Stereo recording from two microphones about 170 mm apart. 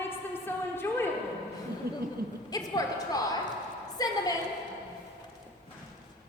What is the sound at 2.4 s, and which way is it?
A woman's voice, 20° left (ahead or behind).